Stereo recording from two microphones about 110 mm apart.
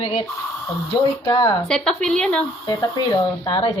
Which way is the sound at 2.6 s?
40° left (ahead or behind).